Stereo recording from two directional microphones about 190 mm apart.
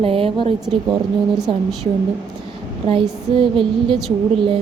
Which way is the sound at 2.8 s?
30° right (ahead or behind).